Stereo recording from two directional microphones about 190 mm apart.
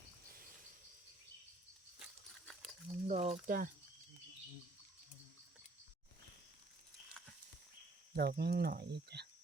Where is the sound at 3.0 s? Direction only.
35° right (ahead or behind).